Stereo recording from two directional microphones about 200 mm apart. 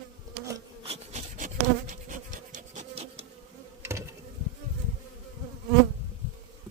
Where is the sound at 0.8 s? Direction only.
30° right (ahead or behind).